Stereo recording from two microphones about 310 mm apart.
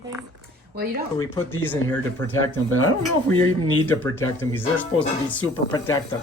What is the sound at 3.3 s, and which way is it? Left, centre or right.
Speech, centre.